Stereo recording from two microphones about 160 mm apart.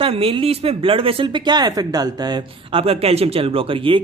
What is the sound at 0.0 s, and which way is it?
Speech, 35° right (ahead or behind).